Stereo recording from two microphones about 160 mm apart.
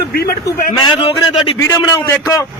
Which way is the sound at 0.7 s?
30° left (ahead or behind).